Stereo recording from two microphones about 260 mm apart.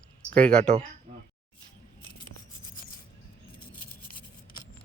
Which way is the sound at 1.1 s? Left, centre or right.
Right.